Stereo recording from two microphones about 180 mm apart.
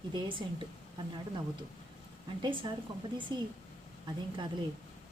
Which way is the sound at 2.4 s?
25° right (ahead or behind).